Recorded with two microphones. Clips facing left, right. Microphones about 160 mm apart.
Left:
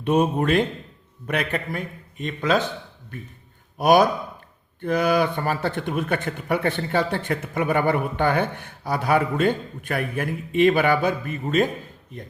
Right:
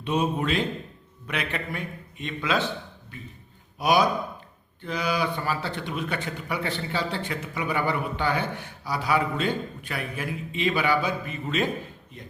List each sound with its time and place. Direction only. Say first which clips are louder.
0.0 s speech: left 5 dB; 50° left (ahead or behind)
3.8 s speech: left 5 dB; 50° left (ahead or behind)